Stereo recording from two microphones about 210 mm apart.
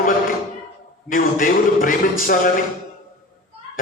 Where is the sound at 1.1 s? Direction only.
40° left (ahead or behind).